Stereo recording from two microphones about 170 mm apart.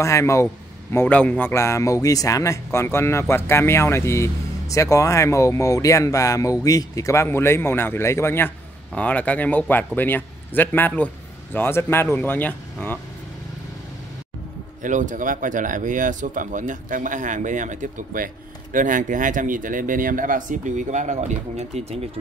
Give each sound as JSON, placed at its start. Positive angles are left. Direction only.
{"t": 0.0, "sound": "speech", "side_deg": 15}
{"t": 14.8, "sound": "speech", "side_deg": -50}